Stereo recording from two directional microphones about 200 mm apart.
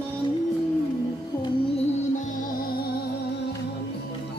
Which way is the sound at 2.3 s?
50° left (ahead or behind).